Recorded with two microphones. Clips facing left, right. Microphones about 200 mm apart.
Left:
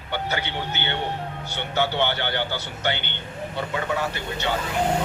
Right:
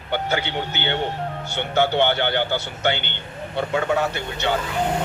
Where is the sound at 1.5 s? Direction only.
55° right (ahead or behind).